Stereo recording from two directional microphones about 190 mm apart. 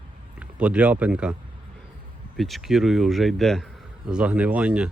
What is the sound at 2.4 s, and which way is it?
Speech, centre (ahead or behind).